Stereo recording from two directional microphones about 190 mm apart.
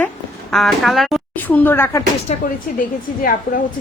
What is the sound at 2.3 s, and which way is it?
Speech, 35° left (ahead or behind).